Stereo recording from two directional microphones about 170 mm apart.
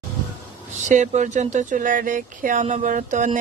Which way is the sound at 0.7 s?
45° right (ahead or behind).